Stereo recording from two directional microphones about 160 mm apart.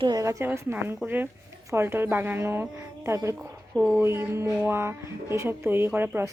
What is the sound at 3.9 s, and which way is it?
Speech, 15° right (ahead or behind).